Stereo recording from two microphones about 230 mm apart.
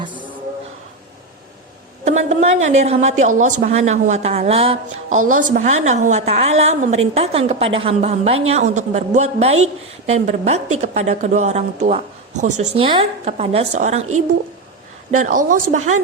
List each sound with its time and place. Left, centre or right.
0.0 s a sound: right
2.0 s speech: right
5.1 s a woman's voice: right
5.5 s speech: right
15.1 s speech: right